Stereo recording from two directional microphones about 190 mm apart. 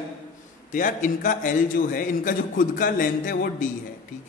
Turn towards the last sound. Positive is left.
turn(degrees=45)  # may be behind; listen again after turning